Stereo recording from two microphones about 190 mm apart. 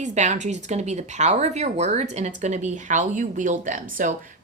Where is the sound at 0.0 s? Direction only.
40° right (ahead or behind).